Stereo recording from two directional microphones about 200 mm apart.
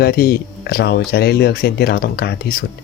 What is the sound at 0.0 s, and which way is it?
Speech, 50° left (ahead or behind).